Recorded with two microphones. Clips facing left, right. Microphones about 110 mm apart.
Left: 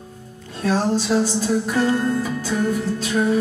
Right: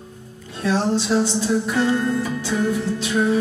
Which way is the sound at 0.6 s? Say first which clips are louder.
Even; 45° left (ahead or behind).